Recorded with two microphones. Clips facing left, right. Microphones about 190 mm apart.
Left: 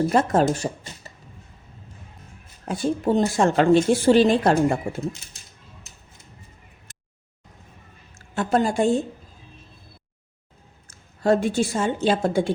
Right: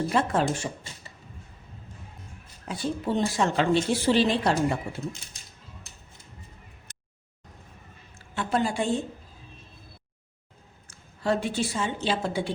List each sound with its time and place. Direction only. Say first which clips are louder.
0.1 s speech: left 5 dB; 45° left (ahead or behind)
2.6 s speech: left 6 dB; 45° left (ahead or behind)
8.1 s a woman's voice: left 6 dB; 45° left (ahead or behind)
10.8 s a woman's voice: left 7 dB; 45° left (ahead or behind)